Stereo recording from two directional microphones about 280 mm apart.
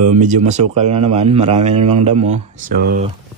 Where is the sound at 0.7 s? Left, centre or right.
Right.